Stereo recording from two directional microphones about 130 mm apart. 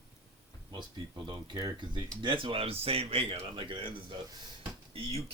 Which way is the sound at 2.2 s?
40° right (ahead or behind).